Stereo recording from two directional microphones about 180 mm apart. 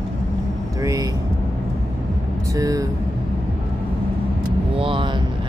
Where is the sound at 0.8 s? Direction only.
20° right (ahead or behind).